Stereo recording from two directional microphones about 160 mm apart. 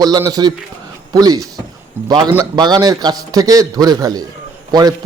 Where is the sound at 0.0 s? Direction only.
25° right (ahead or behind).